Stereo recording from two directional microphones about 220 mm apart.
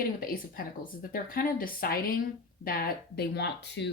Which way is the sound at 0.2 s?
40° left (ahead or behind).